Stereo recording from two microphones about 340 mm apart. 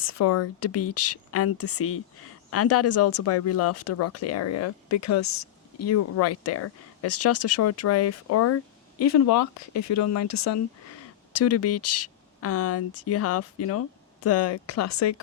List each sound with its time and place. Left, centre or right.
0.0 s speech: left